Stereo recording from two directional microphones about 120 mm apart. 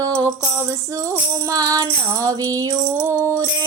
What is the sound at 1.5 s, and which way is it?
Music, 30° right (ahead or behind).